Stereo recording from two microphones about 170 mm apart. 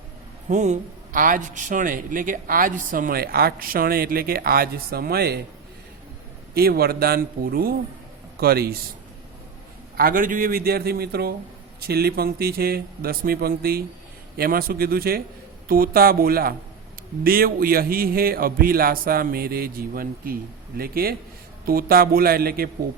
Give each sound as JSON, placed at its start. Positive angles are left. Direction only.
{"t": 0.4, "sound": "a man's voice", "side_deg": -45}
{"t": 6.5, "sound": "a man's voice", "side_deg": -65}
{"t": 10.0, "sound": "a man's voice", "side_deg": -55}